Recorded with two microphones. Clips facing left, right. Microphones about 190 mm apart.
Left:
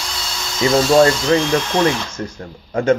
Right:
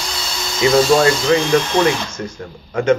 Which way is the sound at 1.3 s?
35° left (ahead or behind).